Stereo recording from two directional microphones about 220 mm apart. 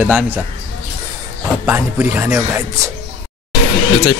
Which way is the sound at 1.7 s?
10° right (ahead or behind).